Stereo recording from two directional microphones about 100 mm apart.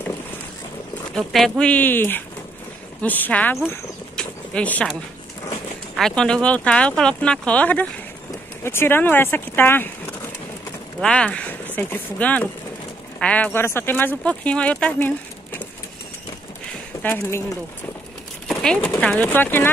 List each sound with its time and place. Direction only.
1.1 s speech: 5° left (ahead or behind)
4.2 s a sound: 15° left (ahead or behind)
5.9 s speech: 5° left (ahead or behind)
11.0 s speech: 10° left (ahead or behind)
13.5 s speech: 25° left (ahead or behind)
17.0 s speech: 20° left (ahead or behind)
18.5 s a sound: 5° left (ahead or behind)
18.9 s speech: 15° left (ahead or behind)